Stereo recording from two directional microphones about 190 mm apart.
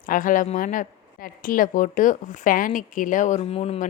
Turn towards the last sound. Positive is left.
turn(degrees=30)  # may be behind; listen again after turning